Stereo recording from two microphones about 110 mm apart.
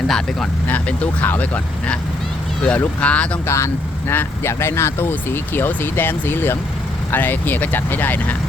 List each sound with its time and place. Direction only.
0.1 s speech: 5° left (ahead or behind)
0.7 s speech: 15° left (ahead or behind)
3.4 s speech: 25° left (ahead or behind)